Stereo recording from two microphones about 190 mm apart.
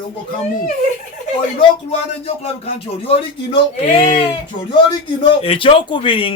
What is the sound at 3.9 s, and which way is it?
Speech, 30° left (ahead or behind).